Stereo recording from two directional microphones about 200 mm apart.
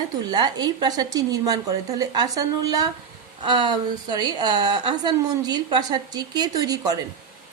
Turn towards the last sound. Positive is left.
turn(degrees=-20)  # may be behind; listen again after turning